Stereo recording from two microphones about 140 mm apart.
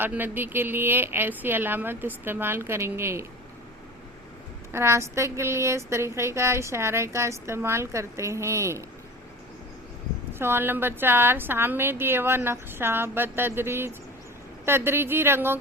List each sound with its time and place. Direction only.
0.0 s a woman's voice: 15° right (ahead or behind)
4.7 s speech: 20° right (ahead or behind)
10.3 s a woman's voice: 15° right (ahead or behind)